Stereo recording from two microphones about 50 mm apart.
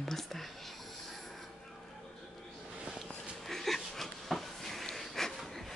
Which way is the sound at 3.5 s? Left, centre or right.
Centre.